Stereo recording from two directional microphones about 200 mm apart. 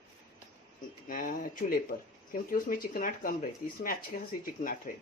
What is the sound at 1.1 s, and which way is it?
Speech, 45° left (ahead or behind).